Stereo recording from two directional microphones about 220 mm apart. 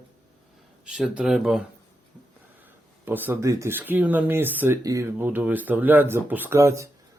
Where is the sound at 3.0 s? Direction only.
10° right (ahead or behind).